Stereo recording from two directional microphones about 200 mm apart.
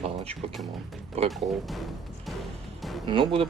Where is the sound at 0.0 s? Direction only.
30° right (ahead or behind).